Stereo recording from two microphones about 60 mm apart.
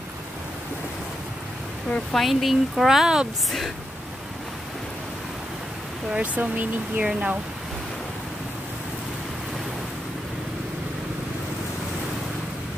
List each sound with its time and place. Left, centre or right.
2.1 s speech: centre
6.1 s speech: right